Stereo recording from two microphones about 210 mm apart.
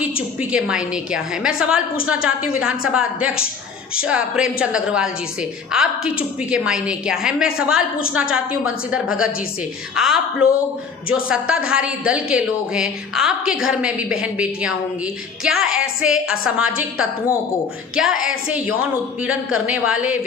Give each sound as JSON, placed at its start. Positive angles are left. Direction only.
{"t": 0.0, "sound": "a woman's voice", "side_deg": -5}